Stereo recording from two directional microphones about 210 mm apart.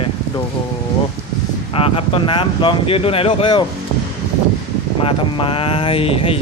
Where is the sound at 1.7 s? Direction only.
25° left (ahead or behind).